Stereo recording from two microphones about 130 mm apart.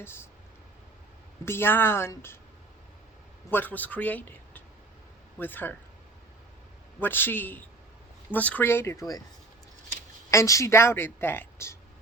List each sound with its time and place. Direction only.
0.0 s a woman's voice: 20° left (ahead or behind)
1.5 s a man's voice: 15° left (ahead or behind)
3.5 s a man's voice: 15° left (ahead or behind)
7.0 s a man's voice: 15° left (ahead or behind)
10.3 s a woman's voice: 25° left (ahead or behind)